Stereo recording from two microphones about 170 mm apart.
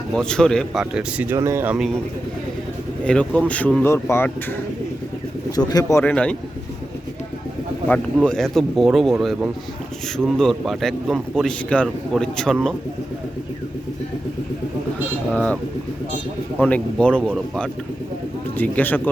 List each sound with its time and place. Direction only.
0.1 s speech: 5° left (ahead or behind)
3.0 s a man's voice: 5° left (ahead or behind)
5.5 s a man's voice: 25° left (ahead or behind)
7.9 s speech: 5° left (ahead or behind)
15.3 s a man's voice: 5° left (ahead or behind)
16.6 s a man's voice: 10° left (ahead or behind)